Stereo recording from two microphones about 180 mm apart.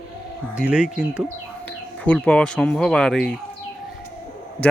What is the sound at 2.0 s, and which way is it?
Speech, 5° left (ahead or behind).